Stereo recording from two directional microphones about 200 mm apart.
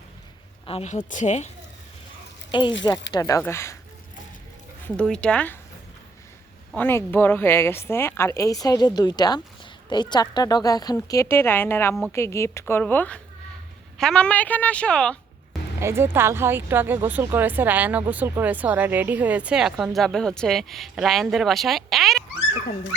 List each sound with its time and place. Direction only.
0.6 s speech: 30° left (ahead or behind)
2.5 s speech: 25° left (ahead or behind)
4.9 s a woman's voice: 5° left (ahead or behind)
6.7 s a woman's voice: 10° left (ahead or behind)
15.8 s speech: 10° right (ahead or behind)